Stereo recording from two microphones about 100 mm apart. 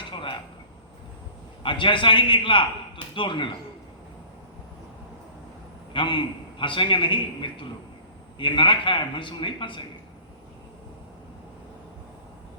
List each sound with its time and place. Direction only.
0.1 s a sound: 55° left (ahead or behind)
1.6 s a man's voice: 55° left (ahead or behind)
5.9 s a man's voice: 55° left (ahead or behind)